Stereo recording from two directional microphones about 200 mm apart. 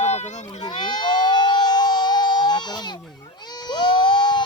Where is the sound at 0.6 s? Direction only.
20° left (ahead or behind).